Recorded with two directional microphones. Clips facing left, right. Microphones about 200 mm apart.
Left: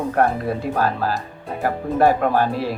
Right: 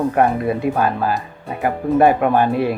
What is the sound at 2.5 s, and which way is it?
Speech, 55° right (ahead or behind).